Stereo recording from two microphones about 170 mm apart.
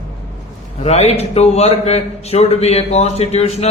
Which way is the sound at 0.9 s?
40° left (ahead or behind).